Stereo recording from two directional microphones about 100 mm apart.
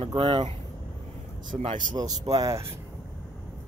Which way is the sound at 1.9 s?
40° right (ahead or behind).